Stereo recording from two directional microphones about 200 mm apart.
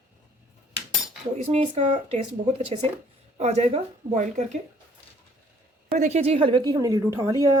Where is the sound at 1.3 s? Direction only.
35° right (ahead or behind).